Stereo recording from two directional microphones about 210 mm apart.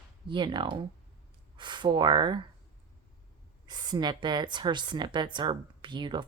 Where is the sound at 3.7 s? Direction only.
20° right (ahead or behind).